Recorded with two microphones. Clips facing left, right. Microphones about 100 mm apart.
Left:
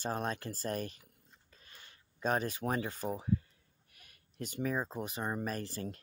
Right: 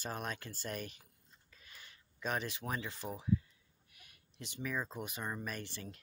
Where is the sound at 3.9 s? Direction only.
45° left (ahead or behind).